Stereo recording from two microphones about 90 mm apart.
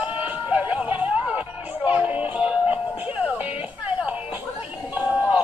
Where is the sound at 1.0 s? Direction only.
15° right (ahead or behind).